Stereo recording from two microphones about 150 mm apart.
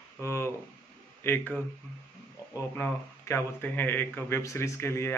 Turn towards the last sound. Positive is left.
turn(degrees=15)  # may be behind; listen again after turning